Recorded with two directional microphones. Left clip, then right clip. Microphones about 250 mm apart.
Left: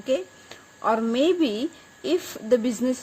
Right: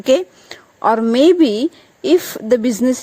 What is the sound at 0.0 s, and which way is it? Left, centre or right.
Speech, right.